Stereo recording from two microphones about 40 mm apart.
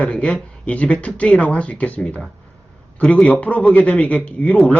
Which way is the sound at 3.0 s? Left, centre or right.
Left.